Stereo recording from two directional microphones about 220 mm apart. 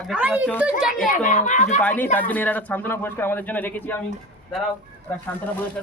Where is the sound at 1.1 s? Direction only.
35° left (ahead or behind).